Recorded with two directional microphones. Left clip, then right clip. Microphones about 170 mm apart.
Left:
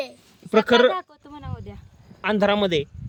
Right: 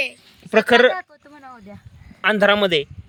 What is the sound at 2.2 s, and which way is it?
Speech, 10° left (ahead or behind).